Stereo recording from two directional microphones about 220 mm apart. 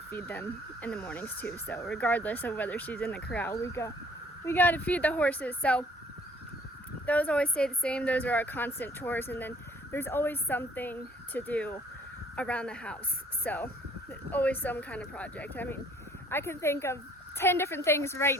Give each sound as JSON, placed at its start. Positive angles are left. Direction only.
{"t": 0.1, "sound": "a woman's voice", "side_deg": 10}
{"t": 7.0, "sound": "a woman's voice", "side_deg": 5}